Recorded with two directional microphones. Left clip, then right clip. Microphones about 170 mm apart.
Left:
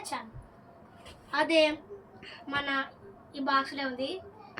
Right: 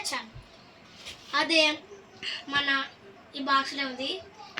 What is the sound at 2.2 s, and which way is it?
Speech, 5° left (ahead or behind).